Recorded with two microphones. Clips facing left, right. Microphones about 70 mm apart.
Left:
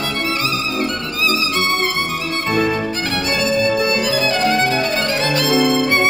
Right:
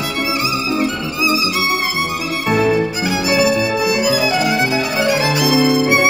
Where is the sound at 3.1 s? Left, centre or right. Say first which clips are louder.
Right 6 dB; centre.